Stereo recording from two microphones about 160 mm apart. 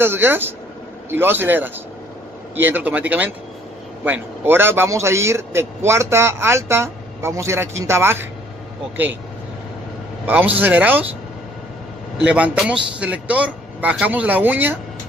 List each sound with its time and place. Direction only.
0.0 s a man's voice: 15° right (ahead or behind)
10.2 s a man's voice: 10° right (ahead or behind)
12.3 s a man's voice: 5° right (ahead or behind)